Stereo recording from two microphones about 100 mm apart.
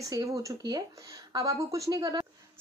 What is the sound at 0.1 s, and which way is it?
A woman's voice, 35° right (ahead or behind).